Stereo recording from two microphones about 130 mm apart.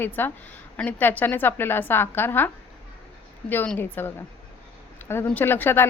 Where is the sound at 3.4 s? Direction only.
5° left (ahead or behind).